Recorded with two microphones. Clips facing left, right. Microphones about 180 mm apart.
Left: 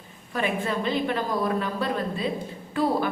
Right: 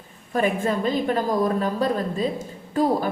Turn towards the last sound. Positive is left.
turn(degrees=-40)  # may be behind; listen again after turning